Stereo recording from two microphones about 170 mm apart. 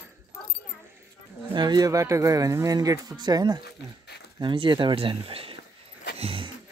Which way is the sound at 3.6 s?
75° left (ahead or behind).